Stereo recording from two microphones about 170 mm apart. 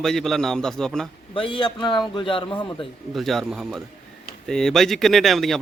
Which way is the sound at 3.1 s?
Centre (ahead or behind).